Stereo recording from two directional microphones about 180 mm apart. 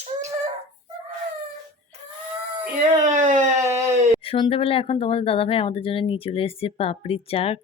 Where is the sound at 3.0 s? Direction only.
45° right (ahead or behind).